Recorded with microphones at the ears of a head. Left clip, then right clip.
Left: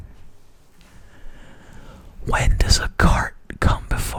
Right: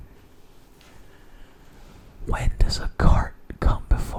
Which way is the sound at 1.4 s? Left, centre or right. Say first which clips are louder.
Left 6 dB; left.